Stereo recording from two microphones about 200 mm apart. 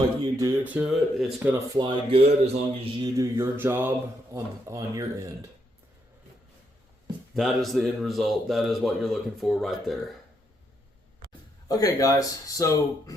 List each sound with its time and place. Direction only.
0.2 s speech: 15° right (ahead or behind)
3.2 s speech: 10° right (ahead or behind)
7.3 s a man's voice: centre (ahead or behind)
11.7 s speech: 15° left (ahead or behind)